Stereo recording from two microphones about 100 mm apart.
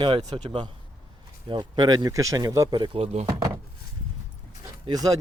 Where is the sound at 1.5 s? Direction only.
45° right (ahead or behind).